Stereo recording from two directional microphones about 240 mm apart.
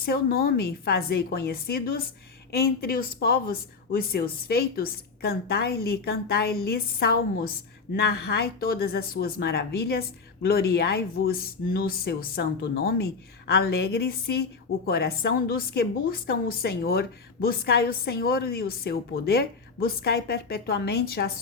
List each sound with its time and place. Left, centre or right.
0.0 s a woman's voice: left